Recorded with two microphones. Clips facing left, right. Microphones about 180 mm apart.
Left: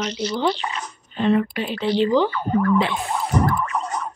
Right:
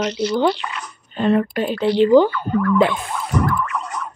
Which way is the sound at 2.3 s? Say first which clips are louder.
Even; 25° left (ahead or behind).